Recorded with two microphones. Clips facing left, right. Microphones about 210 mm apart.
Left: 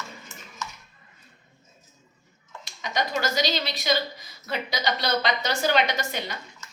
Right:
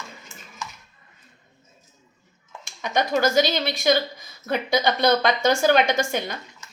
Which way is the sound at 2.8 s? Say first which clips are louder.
Right 6 dB; 50° right (ahead or behind).